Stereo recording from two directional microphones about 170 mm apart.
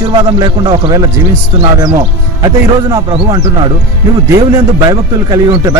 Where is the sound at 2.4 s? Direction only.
25° right (ahead or behind).